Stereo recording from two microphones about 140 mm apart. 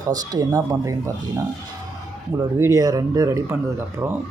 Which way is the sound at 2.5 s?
20° right (ahead or behind).